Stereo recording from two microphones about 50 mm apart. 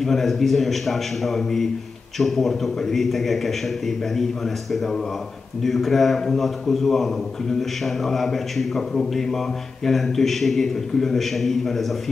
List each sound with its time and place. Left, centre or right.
0.0 s a man's voice: centre